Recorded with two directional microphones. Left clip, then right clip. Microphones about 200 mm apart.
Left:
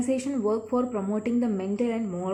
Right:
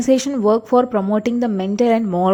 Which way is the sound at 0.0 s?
40° right (ahead or behind).